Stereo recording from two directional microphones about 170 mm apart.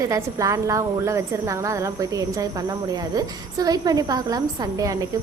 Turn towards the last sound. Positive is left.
turn(degrees=-20)  # may be behind; listen again after turning